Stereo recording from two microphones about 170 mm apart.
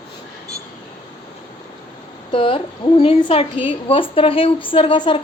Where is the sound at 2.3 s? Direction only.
30° left (ahead or behind).